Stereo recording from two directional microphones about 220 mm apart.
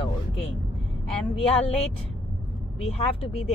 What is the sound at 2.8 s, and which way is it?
Speech, 30° left (ahead or behind).